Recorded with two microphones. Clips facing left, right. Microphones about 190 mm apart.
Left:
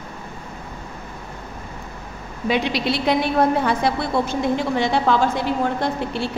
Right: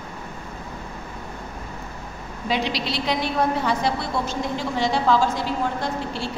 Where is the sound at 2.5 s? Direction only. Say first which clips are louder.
Left 4 dB; 55° left (ahead or behind).